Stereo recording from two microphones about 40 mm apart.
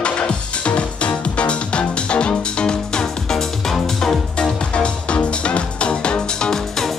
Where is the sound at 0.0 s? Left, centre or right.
Left; by 4.2 s centre.